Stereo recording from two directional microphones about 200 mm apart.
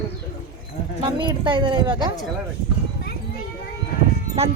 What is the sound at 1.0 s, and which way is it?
A woman's voice, 25° right (ahead or behind).